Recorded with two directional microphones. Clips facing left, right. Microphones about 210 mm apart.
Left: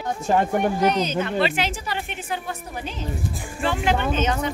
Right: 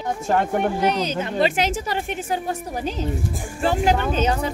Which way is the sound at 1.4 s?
45° right (ahead or behind).